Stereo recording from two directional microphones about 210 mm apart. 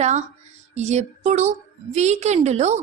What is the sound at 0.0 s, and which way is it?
A woman's voice, 35° right (ahead or behind).